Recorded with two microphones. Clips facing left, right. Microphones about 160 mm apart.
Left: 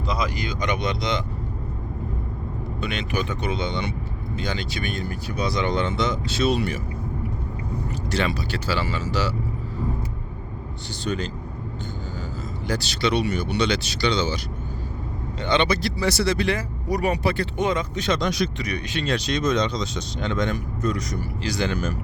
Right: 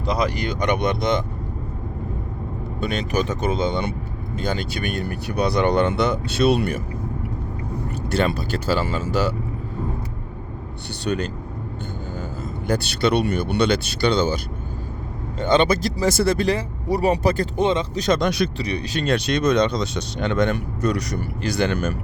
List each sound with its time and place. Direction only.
0.0 s speech: 60° right (ahead or behind)
2.8 s speech: 40° right (ahead or behind)
4.9 s speech: 60° right (ahead or behind)
8.2 s speech: 50° right (ahead or behind)
11.0 s speech: 65° right (ahead or behind)
12.6 s speech: 50° right (ahead or behind)
15.4 s speech: 45° right (ahead or behind)
16.5 s speech: 30° right (ahead or behind)
17.6 s speech: 30° right (ahead or behind)
18.0 s speech: 50° right (ahead or behind)